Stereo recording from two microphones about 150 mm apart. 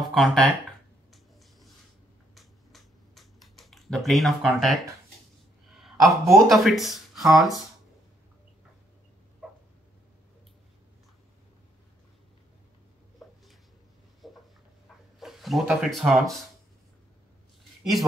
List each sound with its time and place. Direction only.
0.1 s speech: 5° left (ahead or behind)
2.3 s computer keyboard: centre (ahead or behind)
5.7 s a sound: centre (ahead or behind)
6.2 s speech: 20° right (ahead or behind)
6.5 s speech: centre (ahead or behind)
14.2 s a sound: centre (ahead or behind)
15.1 s speech: centre (ahead or behind)